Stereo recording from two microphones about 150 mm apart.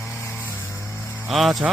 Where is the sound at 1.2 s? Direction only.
Centre (ahead or behind).